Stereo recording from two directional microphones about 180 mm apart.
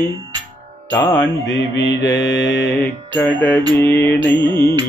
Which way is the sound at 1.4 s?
80° left.